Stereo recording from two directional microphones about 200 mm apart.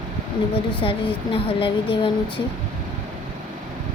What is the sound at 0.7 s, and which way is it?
Speech, 25° left (ahead or behind).